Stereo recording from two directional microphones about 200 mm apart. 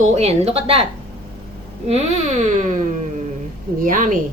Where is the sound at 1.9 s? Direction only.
30° right (ahead or behind).